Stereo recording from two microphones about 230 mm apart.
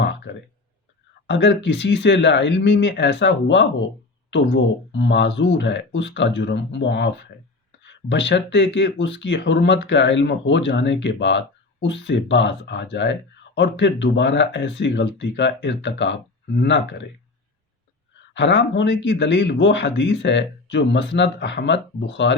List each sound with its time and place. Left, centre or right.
0.3 s speech: left
8.1 s speech: left
18.3 s speech: left